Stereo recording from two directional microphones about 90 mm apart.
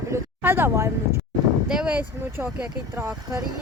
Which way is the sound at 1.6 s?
10° right (ahead or behind).